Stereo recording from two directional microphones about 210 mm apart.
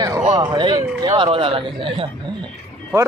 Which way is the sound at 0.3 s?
20° right (ahead or behind).